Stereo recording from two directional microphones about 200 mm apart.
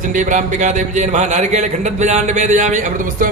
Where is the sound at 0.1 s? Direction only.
40° right (ahead or behind).